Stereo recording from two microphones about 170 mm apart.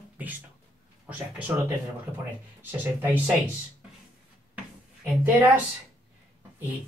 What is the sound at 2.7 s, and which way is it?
Speech, 10° right (ahead or behind).